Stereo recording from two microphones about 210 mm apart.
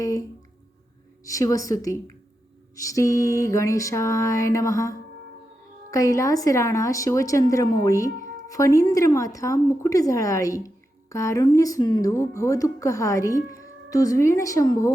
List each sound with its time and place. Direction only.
0.0 s speech: 15° left (ahead or behind)